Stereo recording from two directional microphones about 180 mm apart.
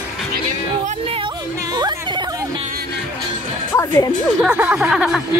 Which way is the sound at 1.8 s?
25° right (ahead or behind).